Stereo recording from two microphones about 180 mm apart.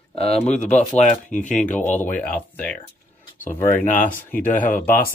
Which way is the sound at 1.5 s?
5° left (ahead or behind).